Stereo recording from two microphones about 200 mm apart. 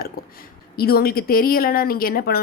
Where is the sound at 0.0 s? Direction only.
50° left (ahead or behind).